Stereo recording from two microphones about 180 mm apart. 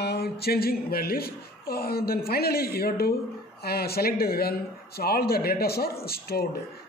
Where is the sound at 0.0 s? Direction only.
65° left (ahead or behind).